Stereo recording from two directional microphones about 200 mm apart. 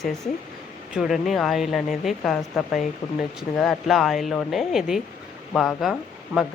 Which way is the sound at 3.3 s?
Centre (ahead or behind).